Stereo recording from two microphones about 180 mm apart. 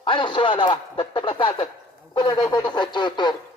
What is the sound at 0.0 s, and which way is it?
Speech, 25° left (ahead or behind).